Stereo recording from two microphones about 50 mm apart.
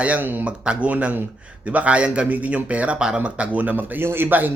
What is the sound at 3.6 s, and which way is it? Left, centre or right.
Speech, right.